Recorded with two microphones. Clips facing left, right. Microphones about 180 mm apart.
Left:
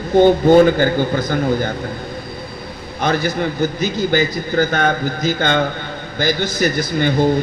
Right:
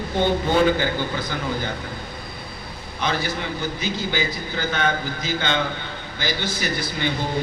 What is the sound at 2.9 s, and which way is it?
A man's voice, 45° left (ahead or behind).